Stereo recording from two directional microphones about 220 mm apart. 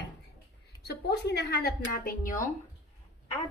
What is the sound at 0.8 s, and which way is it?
A woman's voice, 50° left (ahead or behind).